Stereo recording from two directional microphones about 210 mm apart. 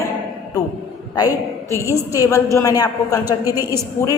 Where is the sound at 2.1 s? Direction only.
15° left (ahead or behind).